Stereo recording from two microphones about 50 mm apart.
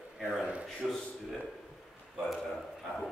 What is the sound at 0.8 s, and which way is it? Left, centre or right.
Speech, centre.